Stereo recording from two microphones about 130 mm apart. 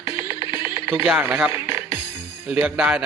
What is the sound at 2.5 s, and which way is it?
Speech, 5° right (ahead or behind).